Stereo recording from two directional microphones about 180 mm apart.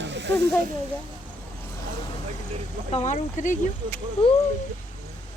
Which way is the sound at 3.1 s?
45° left (ahead or behind).